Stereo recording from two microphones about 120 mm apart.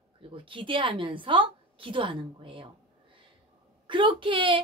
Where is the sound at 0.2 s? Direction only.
45° right (ahead or behind).